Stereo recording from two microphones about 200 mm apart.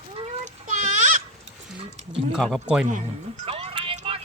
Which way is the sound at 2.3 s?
Centre (ahead or behind).